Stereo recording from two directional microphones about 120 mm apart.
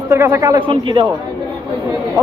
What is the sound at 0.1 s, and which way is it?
Speech, 25° right (ahead or behind).